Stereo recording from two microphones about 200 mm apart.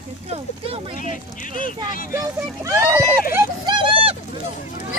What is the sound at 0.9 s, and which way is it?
Speech, 40° left (ahead or behind).